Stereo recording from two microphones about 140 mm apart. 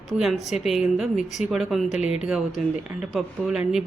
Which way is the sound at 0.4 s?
Centre (ahead or behind).